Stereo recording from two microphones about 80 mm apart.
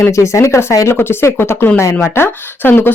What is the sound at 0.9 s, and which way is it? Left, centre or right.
Speech, left.